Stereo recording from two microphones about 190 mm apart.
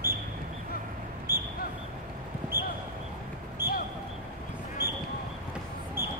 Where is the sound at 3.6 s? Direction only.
10° right (ahead or behind).